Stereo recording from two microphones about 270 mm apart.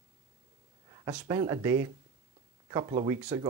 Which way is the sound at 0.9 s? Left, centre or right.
Centre.